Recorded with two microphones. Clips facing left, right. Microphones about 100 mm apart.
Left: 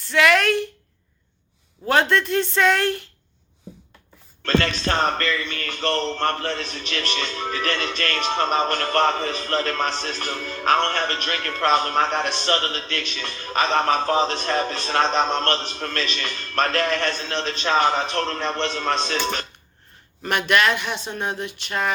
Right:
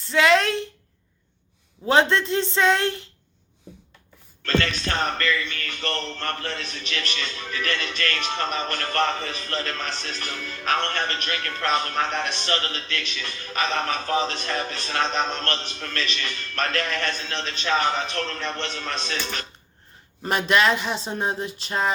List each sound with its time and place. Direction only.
0.0 s speech: 25° right (ahead or behind)
0.4 s speech: 65° left (ahead or behind)
1.9 s speech: 20° right (ahead or behind)
4.4 s speech: 35° left (ahead or behind)
20.2 s speech: 25° right (ahead or behind)